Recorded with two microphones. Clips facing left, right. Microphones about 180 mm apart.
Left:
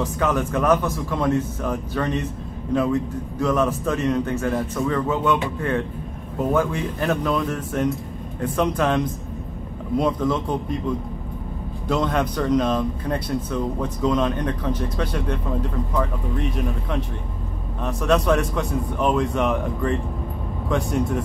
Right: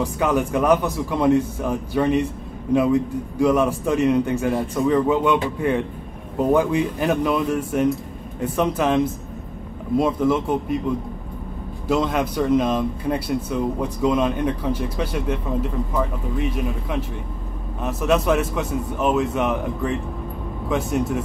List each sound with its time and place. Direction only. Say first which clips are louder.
0.0 s speech: right 2 dB; 15° right (ahead or behind)
11.9 s a man's voice: right 1 dB; 10° right (ahead or behind)